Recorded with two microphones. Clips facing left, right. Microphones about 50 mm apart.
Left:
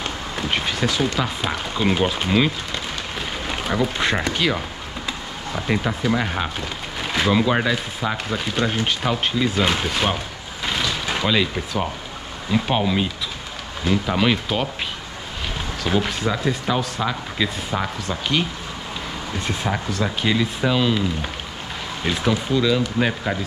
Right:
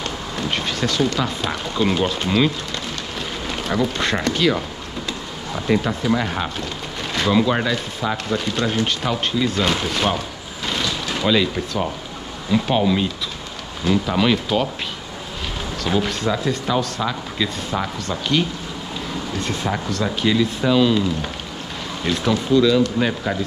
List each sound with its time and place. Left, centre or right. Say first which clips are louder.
0.4 s speech: even; centre
3.2 s a sound: even; centre
5.7 s speech: right 3 dB; centre
15.8 s speech: right 1 dB; centre